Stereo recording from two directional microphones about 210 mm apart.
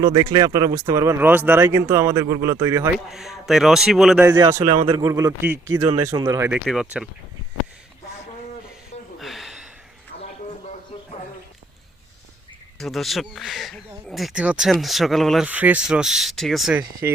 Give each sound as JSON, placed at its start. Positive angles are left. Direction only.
{"t": 0.0, "sound": "a man's voice", "side_deg": -20}
{"t": 3.1, "sound": "a man's voice", "side_deg": 0}
{"t": 9.1, "sound": "a sound", "side_deg": 0}
{"t": 12.8, "sound": "speech", "side_deg": 0}
{"t": 17.0, "sound": "a man's voice", "side_deg": -15}